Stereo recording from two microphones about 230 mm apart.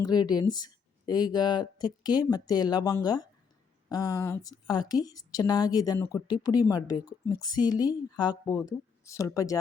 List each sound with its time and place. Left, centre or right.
0.0 s speech: centre